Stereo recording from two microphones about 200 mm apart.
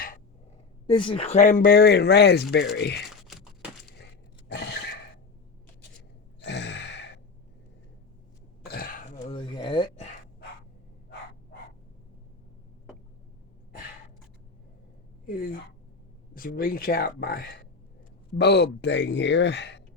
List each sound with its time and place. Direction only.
0.9 s speech: 25° left (ahead or behind); by 3.0 s 60° left (ahead or behind)
3.2 s a sound: centre (ahead or behind)
4.5 s gasp: 55° left (ahead or behind)
6.4 s gasp: 60° left (ahead or behind)
8.6 s throat clearing: 50° left (ahead or behind)
9.2 s a sound: 25° left (ahead or behind)
16.3 s speech: 45° left (ahead or behind)